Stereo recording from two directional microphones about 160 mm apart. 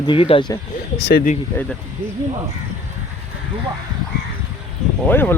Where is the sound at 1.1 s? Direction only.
70° left (ahead or behind).